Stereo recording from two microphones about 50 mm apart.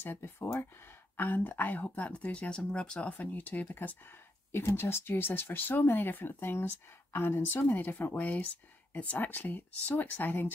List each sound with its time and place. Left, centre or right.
0.0 s speech: left
1.1 s speech: left
4.5 s speech: left
7.6 s speech: left